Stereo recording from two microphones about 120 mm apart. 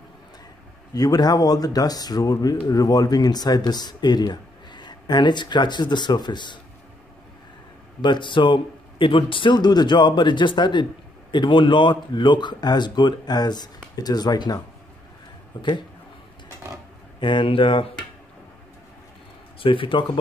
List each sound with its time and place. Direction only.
0.9 s speech: 35° left (ahead or behind)
8.0 s speech: 40° left (ahead or behind)
17.2 s speech: 40° left (ahead or behind)
19.6 s speech: 45° left (ahead or behind)